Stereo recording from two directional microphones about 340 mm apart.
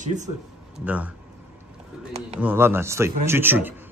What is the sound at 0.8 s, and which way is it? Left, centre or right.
Speech, centre.